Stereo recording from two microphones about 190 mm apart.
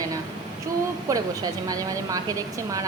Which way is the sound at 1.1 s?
15° right (ahead or behind).